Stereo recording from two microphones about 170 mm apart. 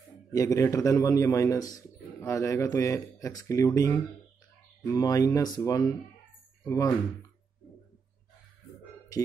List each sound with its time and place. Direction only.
0.3 s a man's voice: 20° left (ahead or behind)